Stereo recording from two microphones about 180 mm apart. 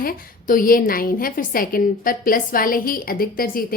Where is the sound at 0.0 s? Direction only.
50° left (ahead or behind).